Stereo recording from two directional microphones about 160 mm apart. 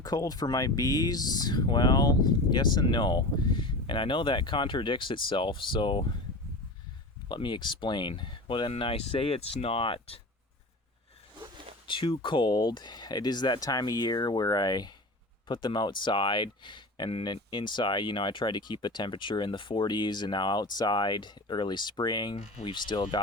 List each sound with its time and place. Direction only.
0.0 s speech: 25° left (ahead or behind)
7.3 s speech: 30° left (ahead or behind)
11.3 s zipper: 30° right (ahead or behind)
11.9 s speech: 30° left (ahead or behind)